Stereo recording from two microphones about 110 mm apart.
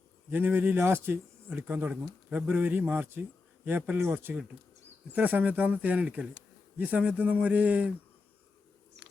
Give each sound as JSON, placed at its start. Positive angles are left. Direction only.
{"t": 0.3, "sound": "speech", "side_deg": -20}